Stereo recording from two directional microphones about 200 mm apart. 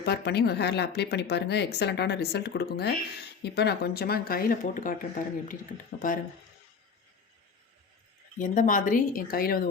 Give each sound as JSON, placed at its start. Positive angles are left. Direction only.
{"t": 0.0, "sound": "speech", "side_deg": 55}
{"t": 8.4, "sound": "speech", "side_deg": 40}